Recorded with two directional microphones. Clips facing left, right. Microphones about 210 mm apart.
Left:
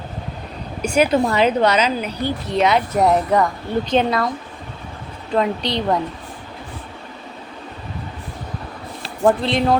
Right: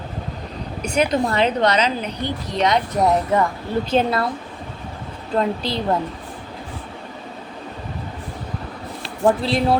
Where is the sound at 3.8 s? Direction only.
5° right (ahead or behind).